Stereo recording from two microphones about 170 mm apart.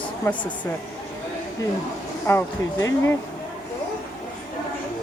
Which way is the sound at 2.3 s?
15° left (ahead or behind).